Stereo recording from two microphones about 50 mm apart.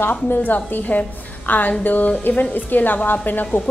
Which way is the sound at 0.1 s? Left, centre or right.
Left.